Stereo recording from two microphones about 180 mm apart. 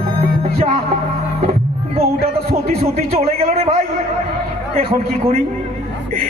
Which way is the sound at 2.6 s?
35° right (ahead or behind).